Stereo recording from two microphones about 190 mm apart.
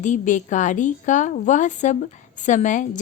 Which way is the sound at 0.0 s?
40° left (ahead or behind).